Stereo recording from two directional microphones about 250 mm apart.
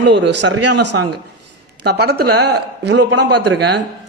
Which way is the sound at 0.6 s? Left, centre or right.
Right.